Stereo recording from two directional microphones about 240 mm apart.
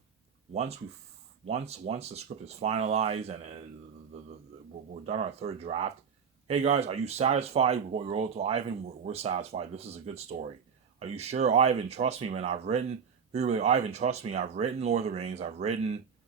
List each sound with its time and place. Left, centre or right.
0.5 s speech: right
5.0 s speech: right